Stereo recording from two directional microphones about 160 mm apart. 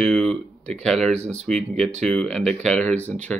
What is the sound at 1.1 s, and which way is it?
Speech, 45° right (ahead or behind).